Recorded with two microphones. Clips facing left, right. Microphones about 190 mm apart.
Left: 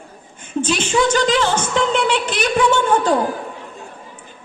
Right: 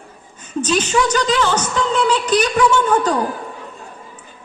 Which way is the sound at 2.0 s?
25° left (ahead or behind).